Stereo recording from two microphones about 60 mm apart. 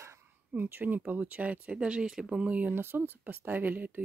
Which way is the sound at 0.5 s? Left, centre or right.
Right.